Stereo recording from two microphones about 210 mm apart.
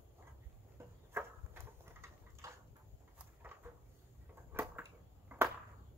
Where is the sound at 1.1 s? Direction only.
10° right (ahead or behind).